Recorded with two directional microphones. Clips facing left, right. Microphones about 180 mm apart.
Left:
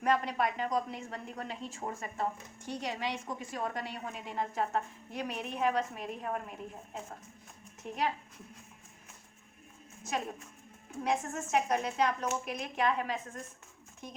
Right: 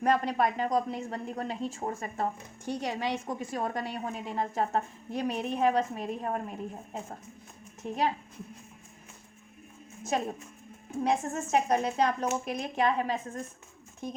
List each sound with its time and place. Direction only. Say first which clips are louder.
0.0 s a woman's voice: right 4 dB; 40° right (ahead or behind)
10.0 s a woman's voice: right 5 dB; 30° right (ahead or behind)